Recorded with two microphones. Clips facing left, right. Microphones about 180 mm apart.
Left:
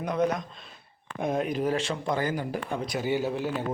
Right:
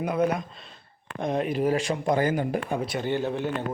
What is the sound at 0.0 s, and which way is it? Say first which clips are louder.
A man's voice: right 2 dB; 10° right (ahead or behind).